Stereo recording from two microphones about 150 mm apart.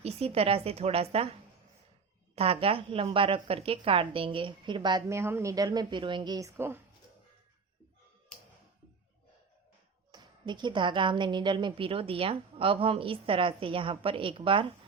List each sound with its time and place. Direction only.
0.0 s a woman's voice: 40° right (ahead or behind)
2.3 s a woman's voice: 40° right (ahead or behind); by 6.8 s 15° right (ahead or behind)
10.1 s a woman's voice: 30° right (ahead or behind)